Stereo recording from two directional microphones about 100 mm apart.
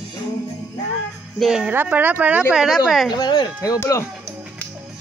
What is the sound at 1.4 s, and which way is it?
Speech, 5° right (ahead or behind).